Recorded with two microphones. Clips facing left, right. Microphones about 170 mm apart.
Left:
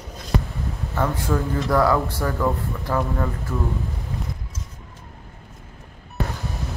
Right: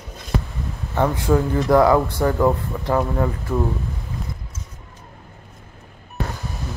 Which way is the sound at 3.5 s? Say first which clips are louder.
Right 7 dB; 40° right (ahead or behind).